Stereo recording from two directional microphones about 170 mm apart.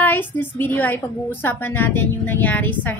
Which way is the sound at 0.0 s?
10° left (ahead or behind).